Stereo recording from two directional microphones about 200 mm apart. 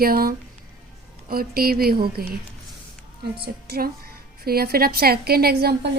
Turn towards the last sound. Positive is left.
turn(degrees=-50)  # may be behind; listen again after turning